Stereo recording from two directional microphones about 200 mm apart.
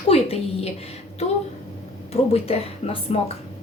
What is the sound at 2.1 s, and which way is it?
A woman's voice, 30° left (ahead or behind).